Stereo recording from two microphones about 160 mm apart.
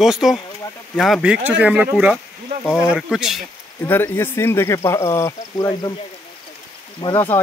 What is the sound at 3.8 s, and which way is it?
Speech, 15° left (ahead or behind).